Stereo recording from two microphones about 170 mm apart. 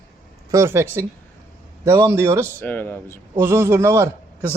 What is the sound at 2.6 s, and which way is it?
Speech, 10° left (ahead or behind).